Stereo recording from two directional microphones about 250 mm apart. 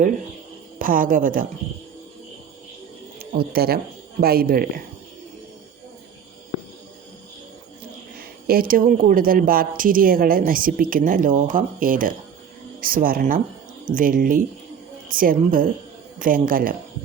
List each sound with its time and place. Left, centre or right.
0.8 s speech: right
3.2 s speech: right
8.4 s speech: right